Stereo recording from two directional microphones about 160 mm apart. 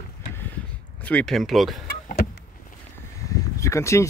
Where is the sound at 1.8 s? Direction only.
70° left (ahead or behind).